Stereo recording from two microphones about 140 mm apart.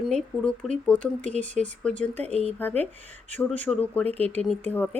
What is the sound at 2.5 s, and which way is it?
A woman's voice, 10° left (ahead or behind).